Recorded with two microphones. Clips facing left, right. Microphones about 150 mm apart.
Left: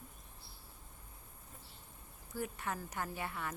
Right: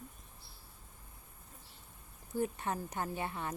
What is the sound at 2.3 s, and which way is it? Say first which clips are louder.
A woman's voice: right 5 dB; 25° right (ahead or behind).